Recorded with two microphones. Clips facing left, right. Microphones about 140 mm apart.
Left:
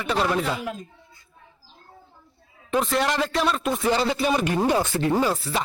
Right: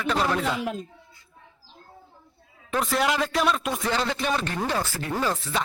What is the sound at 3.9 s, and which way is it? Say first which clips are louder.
Speech: left 4 dB; 10° left (ahead or behind).